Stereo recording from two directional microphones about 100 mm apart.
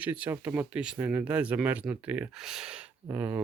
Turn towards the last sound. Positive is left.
turn(degrees=-20)  # may be behind; listen again after turning